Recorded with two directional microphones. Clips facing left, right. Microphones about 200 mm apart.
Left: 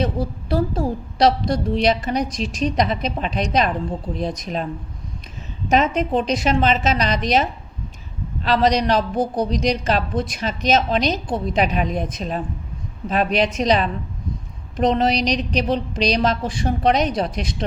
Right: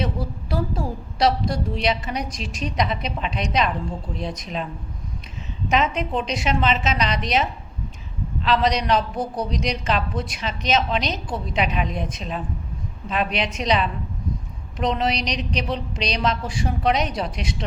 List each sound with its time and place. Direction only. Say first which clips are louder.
0.0 s a woman's voice: left 4 dB; 40° left (ahead or behind)
5.7 s a woman's voice: left 4 dB; 40° left (ahead or behind)
8.4 s a woman's voice: left 3 dB; 40° left (ahead or behind)
13.1 s a woman's voice: left 5 dB; 40° left (ahead or behind)